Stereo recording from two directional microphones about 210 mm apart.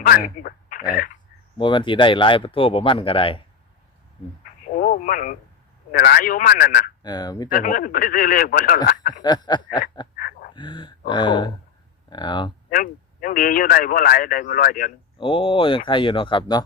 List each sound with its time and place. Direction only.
0.4 s a sound: 40° left (ahead or behind)
1.5 s speech: 25° left (ahead or behind)
4.6 s radio: 40° left (ahead or behind)
5.9 s a man's voice: 50° left (ahead or behind)
7.0 s speech: 20° left (ahead or behind)
7.5 s speech: 40° left (ahead or behind)
9.2 s speech: 20° left (ahead or behind)
10.2 s dog: 45° left (ahead or behind)
10.5 s speech: 20° left (ahead or behind)
12.7 s speech: 40° left (ahead or behind)
15.2 s speech: 25° left (ahead or behind)